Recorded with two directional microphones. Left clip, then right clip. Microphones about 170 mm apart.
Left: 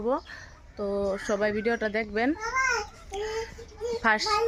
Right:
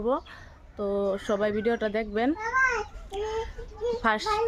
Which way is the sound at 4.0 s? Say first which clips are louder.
Left 3 dB; 5° right (ahead or behind).